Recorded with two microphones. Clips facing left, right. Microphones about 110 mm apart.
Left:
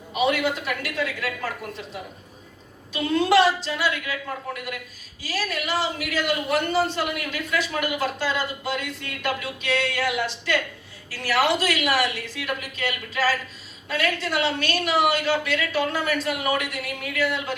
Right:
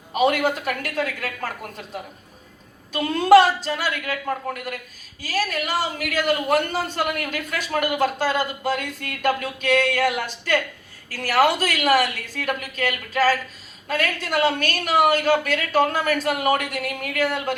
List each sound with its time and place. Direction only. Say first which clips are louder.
0.1 s a man's voice: right 3 dB; 45° right (ahead or behind)